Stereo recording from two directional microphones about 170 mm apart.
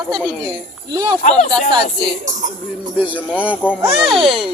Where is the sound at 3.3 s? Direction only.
10° left (ahead or behind).